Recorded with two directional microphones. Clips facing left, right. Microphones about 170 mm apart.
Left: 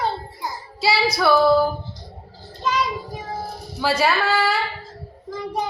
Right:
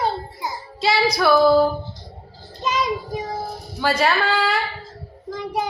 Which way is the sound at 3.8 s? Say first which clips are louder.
Even; 5° left (ahead or behind).